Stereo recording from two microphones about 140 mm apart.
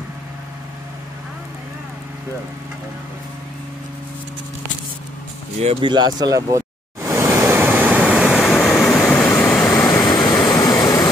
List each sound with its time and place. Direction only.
5.6 s speech: 45° right (ahead or behind)
5.9 s waves: 30° right (ahead or behind); by 10.0 s 5° left (ahead or behind)
10.5 s vehicle: 30° left (ahead or behind)